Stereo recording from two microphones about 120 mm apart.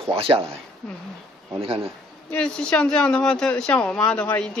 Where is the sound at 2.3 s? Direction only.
5° left (ahead or behind).